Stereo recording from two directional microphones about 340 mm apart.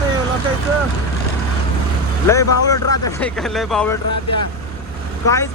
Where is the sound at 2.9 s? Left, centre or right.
Centre.